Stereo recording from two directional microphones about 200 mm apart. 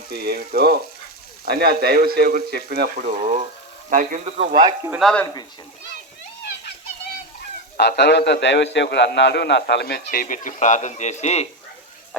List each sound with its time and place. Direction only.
0.1 s speech: 50° right (ahead or behind)
4.9 s speech: centre (ahead or behind)
5.2 s speech: 20° left (ahead or behind)
7.8 s a man's voice: 55° left (ahead or behind); by 11.4 s 35° left (ahead or behind)